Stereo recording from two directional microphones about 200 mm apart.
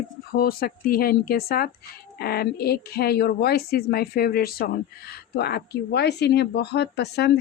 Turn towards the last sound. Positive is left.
turn(degrees=55)  # may be behind; listen again after turning